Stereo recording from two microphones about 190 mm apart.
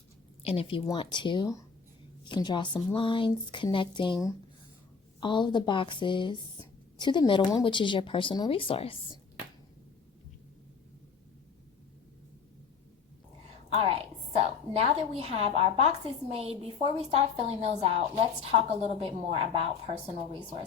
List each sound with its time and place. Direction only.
0.4 s speech: 30° left (ahead or behind)
13.7 s a woman's voice: 30° right (ahead or behind)